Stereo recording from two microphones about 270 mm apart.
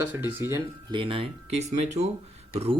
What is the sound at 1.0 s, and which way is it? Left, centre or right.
Speech, centre.